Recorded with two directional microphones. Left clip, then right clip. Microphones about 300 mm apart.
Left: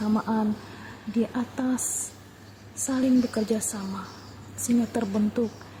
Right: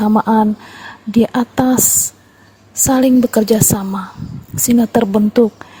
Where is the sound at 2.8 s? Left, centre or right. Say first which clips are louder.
Right 12 dB; right.